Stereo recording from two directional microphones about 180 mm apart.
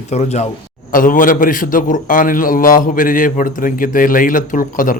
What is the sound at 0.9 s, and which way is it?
A man's voice, 50° left (ahead or behind).